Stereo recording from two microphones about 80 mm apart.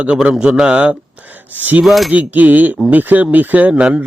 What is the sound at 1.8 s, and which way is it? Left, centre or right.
Speech, centre.